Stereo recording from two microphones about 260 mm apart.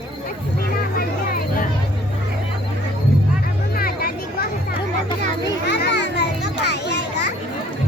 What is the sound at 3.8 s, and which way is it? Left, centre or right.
Music, left.